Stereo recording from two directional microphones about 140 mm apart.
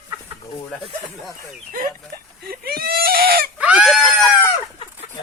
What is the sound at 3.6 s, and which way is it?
Screaming, 5° right (ahead or behind).